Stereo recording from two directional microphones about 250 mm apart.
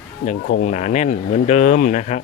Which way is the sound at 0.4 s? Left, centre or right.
Left.